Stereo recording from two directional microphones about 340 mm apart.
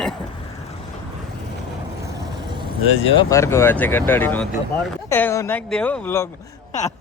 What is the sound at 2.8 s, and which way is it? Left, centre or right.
Speech, left.